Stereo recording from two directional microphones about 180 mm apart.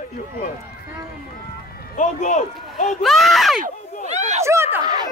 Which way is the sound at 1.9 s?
45° left (ahead or behind).